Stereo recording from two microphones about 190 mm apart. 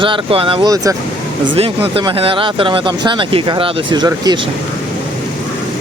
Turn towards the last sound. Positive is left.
turn(degrees=-20)  # may be behind; listen again after turning